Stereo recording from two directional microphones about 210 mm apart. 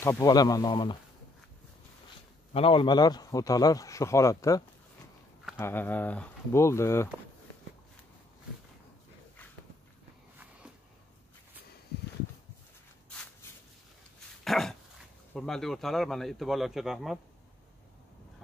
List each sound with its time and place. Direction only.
0.0 s speech: 15° left (ahead or behind)
2.5 s a man's voice: 25° left (ahead or behind)
13.1 s a sound: 5° left (ahead or behind)
14.4 s dog: centre (ahead or behind)
15.3 s speech: centre (ahead or behind)